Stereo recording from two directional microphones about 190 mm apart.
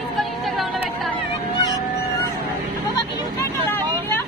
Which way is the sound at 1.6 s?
20° left (ahead or behind).